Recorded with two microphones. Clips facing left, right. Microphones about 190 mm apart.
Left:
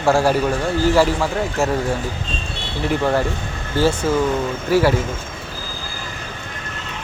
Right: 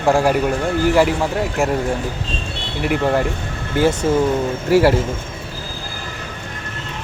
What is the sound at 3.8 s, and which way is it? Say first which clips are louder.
Speech: right 1 dB; 20° right (ahead or behind).